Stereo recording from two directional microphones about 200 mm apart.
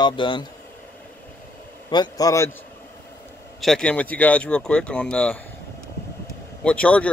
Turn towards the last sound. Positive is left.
turn(degrees=5)  # may be behind; listen again after turning